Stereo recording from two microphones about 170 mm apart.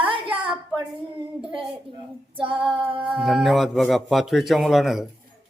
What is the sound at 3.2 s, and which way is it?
A man's voice, centre (ahead or behind).